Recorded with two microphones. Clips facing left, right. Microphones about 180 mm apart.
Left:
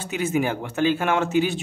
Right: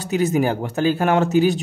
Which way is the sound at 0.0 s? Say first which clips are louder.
Right 5 dB; 40° right (ahead or behind).